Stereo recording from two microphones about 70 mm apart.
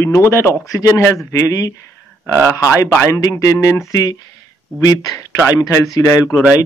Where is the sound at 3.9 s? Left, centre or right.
Left.